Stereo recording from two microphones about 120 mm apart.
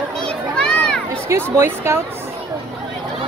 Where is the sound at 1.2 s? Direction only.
20° right (ahead or behind).